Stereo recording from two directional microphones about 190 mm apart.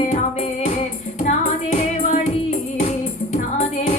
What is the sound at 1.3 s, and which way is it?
Music, 40° left (ahead or behind).